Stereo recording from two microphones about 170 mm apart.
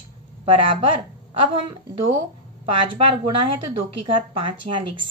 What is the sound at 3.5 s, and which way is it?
A woman's voice, 30° right (ahead or behind).